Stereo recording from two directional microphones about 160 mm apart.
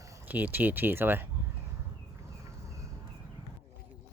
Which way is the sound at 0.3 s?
10° right (ahead or behind).